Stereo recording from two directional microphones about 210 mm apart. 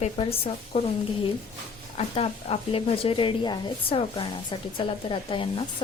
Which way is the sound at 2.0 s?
30° left (ahead or behind).